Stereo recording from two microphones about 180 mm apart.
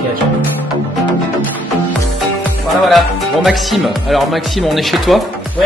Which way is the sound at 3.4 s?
Centre (ahead or behind).